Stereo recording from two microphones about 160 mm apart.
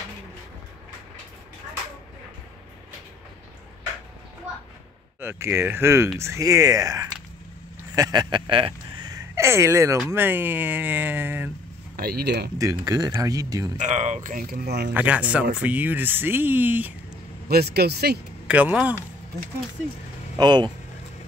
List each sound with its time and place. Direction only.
5.2 s speech: 15° right (ahead or behind)
7.9 s a sound: 25° right (ahead or behind)
10.0 s speech: 15° right (ahead or behind)
12.0 s speech: 75° right (ahead or behind)
12.5 s speech: 20° right (ahead or behind)
13.7 s speech: 45° right (ahead or behind); by 14.9 s 90° right
15.0 s speech: 10° right (ahead or behind)
17.5 s speech: 80° right
18.5 s speech: 10° right (ahead or behind)
20.3 s speech: 25° right (ahead or behind)